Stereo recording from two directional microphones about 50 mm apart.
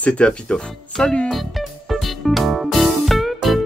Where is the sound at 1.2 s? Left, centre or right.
Centre.